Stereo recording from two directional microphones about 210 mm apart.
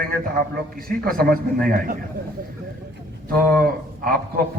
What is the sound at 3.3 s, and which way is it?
Speech, 45° right (ahead or behind).